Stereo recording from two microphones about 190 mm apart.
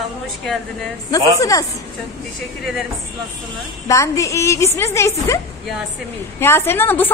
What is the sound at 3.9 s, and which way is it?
A woman's voice, 15° left (ahead or behind).